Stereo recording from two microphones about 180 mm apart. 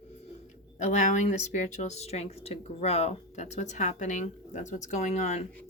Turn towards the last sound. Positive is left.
turn(degrees=40)  # may be behind; listen again after turning